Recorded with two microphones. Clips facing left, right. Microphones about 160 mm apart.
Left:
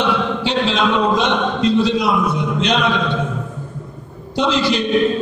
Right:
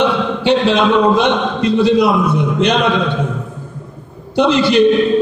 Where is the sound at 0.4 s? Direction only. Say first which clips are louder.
Right 5 dB; 60° right (ahead or behind).